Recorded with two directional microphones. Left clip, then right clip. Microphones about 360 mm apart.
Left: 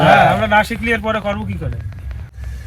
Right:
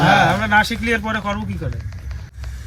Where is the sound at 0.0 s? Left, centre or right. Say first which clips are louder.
Left 4 dB; centre.